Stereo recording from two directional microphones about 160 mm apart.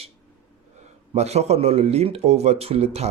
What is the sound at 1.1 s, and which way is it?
Speech, 40° right (ahead or behind).